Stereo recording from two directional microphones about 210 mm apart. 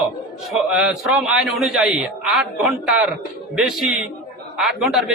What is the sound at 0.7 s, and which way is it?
A man's voice, 5° right (ahead or behind).